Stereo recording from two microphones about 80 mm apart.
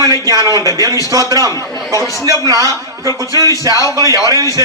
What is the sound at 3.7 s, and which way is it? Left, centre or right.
A man's voice, right.